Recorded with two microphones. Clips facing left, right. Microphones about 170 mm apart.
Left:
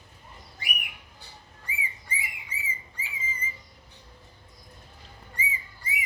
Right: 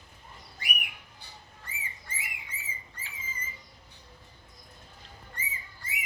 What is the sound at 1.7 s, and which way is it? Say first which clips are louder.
Bird: left 7 dB; 10° left (ahead or behind).